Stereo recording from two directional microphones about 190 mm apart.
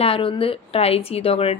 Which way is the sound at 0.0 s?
30° left (ahead or behind).